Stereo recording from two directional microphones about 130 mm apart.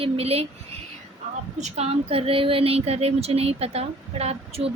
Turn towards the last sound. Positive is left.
turn(degrees=-50)  # may be behind; listen again after turning